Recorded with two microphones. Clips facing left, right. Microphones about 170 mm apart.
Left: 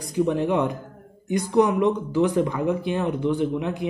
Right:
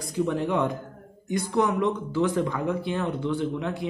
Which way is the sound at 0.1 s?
15° left (ahead or behind).